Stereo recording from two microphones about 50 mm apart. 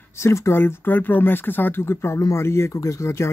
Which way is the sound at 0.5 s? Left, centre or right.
Left.